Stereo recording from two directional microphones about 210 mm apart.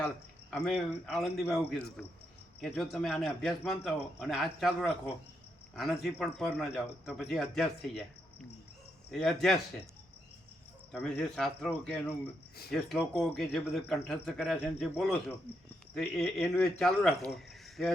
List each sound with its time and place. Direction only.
0.5 s speech: 5° left (ahead or behind)
10.9 s speech: 5° left (ahead or behind)
15.5 s speech: 50° left (ahead or behind)
16.0 s speech: 5° left (ahead or behind)